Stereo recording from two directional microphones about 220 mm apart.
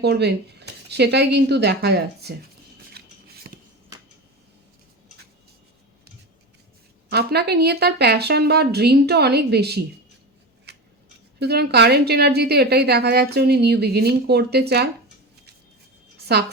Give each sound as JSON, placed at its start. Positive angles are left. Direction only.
{"t": 0.0, "sound": "a woman's voice", "side_deg": -50}
{"t": 3.0, "sound": "scissors", "side_deg": -45}
{"t": 7.1, "sound": "a woman's voice", "side_deg": -45}
{"t": 10.7, "sound": "scissors", "side_deg": -50}
{"t": 11.3, "sound": "a woman's voice", "side_deg": -45}
{"t": 16.3, "sound": "a woman's voice", "side_deg": -50}